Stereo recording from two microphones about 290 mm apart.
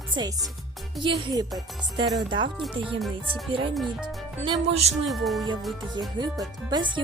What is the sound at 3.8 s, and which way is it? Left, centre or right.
Speech, centre.